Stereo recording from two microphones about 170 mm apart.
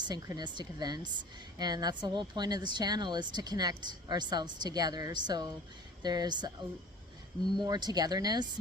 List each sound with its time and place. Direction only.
0.0 s a woman's voice: 25° right (ahead or behind)
7.6 s a woman's voice: 25° right (ahead or behind)